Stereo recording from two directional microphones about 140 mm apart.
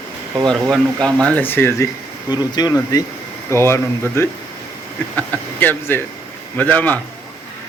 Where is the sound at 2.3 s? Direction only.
30° left (ahead or behind); by 6.9 s 10° left (ahead or behind).